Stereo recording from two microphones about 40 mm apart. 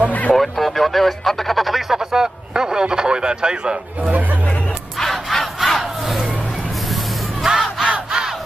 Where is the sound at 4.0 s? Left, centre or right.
Right.